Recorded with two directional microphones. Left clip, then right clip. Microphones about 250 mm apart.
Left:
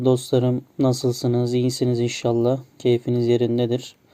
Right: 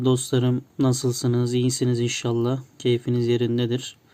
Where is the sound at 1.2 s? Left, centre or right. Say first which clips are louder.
Left 3 dB; right.